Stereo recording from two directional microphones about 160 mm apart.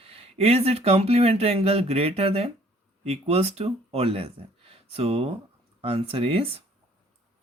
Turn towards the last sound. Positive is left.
turn(degrees=-35)  # may be behind; listen again after turning